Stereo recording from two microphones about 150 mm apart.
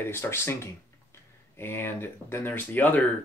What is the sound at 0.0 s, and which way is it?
Speech, 15° left (ahead or behind).